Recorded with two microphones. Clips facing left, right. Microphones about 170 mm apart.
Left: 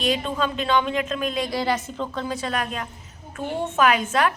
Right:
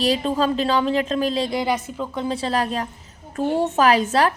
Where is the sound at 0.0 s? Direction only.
35° right (ahead or behind).